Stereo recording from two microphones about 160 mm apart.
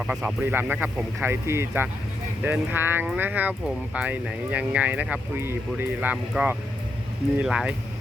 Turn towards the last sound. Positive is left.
turn(degrees=-5)  # may be behind; listen again after turning